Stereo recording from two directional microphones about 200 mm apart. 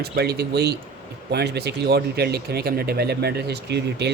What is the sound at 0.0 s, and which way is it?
Speech, 55° right (ahead or behind).